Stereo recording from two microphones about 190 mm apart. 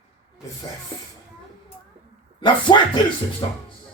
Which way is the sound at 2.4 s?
25° left (ahead or behind).